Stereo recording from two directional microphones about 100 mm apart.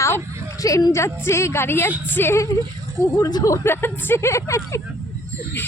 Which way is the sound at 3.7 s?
20° left (ahead or behind).